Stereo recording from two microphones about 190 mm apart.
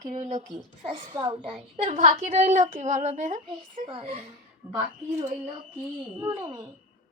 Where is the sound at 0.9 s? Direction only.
25° right (ahead or behind).